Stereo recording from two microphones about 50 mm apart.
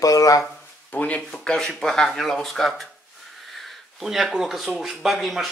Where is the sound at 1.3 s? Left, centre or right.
Centre.